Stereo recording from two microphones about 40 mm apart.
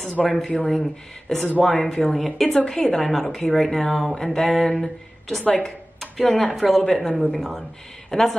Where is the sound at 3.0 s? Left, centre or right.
Centre.